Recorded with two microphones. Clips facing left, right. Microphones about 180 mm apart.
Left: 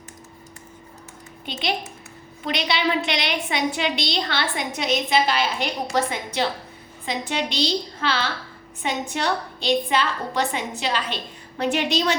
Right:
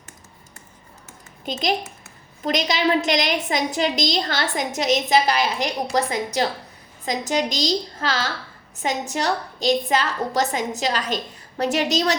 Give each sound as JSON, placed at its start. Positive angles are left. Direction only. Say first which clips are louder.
{"t": 1.5, "sound": "a woman's voice", "louder": "right 4 dB", "side_deg": -40}